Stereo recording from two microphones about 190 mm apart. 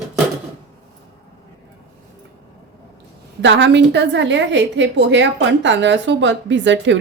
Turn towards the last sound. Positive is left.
turn(degrees=-70)  # may be behind; listen again after turning